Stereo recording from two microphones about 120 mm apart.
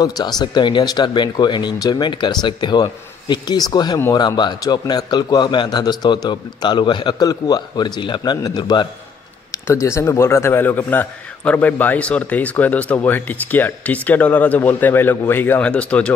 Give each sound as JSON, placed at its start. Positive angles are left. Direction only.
{"t": 0.0, "sound": "a man's voice", "side_deg": 35}
{"t": 9.5, "sound": "a man's voice", "side_deg": 25}